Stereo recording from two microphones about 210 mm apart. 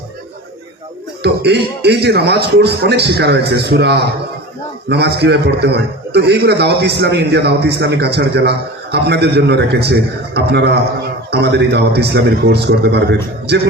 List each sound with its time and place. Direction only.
1.2 s a man's voice: 50° right (ahead or behind)